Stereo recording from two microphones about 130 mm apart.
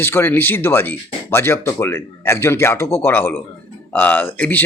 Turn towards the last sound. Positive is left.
turn(degrees=15)  # may be behind; listen again after turning